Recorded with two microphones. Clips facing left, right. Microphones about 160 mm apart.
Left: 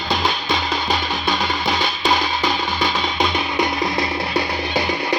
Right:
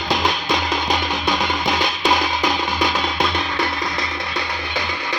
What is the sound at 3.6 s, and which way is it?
Music, 20° left (ahead or behind).